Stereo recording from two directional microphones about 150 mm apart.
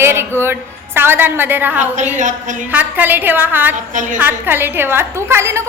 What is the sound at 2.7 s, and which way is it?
A woman's voice, 10° right (ahead or behind).